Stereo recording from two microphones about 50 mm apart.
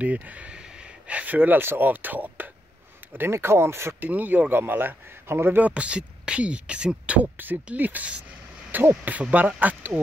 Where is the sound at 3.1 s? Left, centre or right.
Right.